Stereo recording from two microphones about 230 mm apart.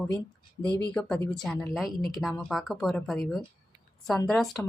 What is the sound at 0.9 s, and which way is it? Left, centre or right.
A woman's voice, centre.